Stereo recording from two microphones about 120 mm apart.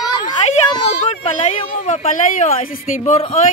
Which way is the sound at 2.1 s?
90° left.